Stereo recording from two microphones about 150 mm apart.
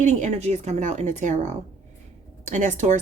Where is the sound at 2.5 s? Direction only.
55° right (ahead or behind).